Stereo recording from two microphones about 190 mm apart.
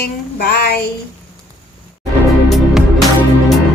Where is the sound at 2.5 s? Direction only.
Centre (ahead or behind).